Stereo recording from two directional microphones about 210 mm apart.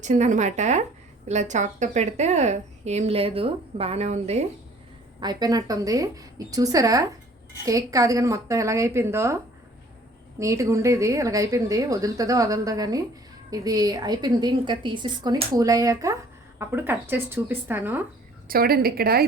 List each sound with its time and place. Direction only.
0.0 s a woman's voice: 35° right (ahead or behind)
5.2 s a woman's voice: 20° right (ahead or behind)
18.4 s a woman's voice: 45° right (ahead or behind)